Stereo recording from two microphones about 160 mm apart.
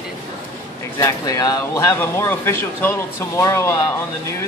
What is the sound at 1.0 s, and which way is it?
Speech, 20° left (ahead or behind).